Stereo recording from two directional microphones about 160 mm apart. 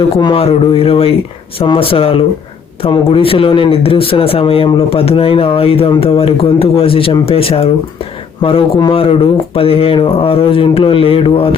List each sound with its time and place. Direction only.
0.2 s speech: 35° left (ahead or behind)